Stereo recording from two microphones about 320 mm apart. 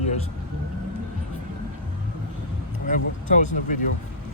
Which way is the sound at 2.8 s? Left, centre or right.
Left.